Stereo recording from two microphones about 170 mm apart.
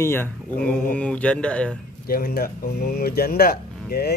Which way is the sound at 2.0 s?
60° left (ahead or behind).